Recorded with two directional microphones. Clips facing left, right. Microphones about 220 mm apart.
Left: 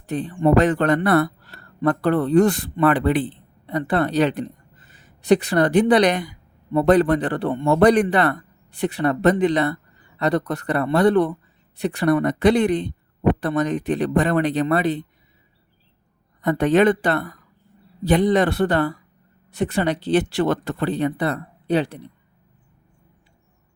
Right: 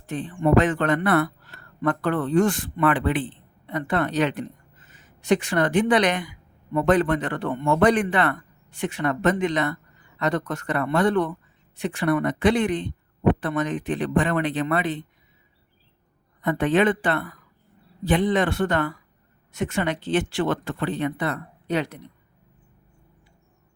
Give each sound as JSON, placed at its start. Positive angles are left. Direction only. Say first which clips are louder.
{"t": 0.0, "sound": "speech", "louder": "left 4 dB", "side_deg": 35}
{"t": 16.4, "sound": "speech", "louder": "left 4 dB", "side_deg": 40}